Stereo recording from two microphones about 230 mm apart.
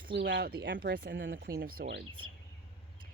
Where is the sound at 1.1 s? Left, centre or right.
Right.